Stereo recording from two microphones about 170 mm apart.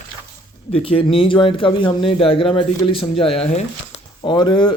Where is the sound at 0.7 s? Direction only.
35° left (ahead or behind).